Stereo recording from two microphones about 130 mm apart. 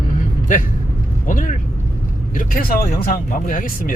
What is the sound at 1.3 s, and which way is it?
Speech, 90° left.